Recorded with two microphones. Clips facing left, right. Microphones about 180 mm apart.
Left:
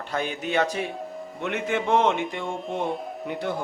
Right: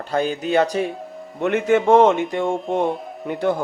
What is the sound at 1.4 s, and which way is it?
Speech, 50° right (ahead or behind).